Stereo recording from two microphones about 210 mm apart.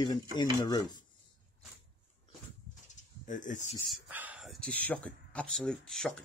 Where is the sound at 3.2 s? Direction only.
35° left (ahead or behind).